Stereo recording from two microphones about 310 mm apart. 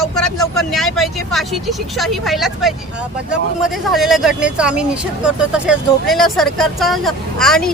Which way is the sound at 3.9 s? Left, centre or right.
Centre.